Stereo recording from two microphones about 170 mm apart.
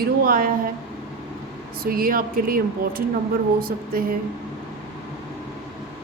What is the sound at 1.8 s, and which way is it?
Speech, 60° right (ahead or behind).